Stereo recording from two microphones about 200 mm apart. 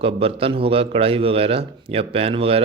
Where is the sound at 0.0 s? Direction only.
30° right (ahead or behind).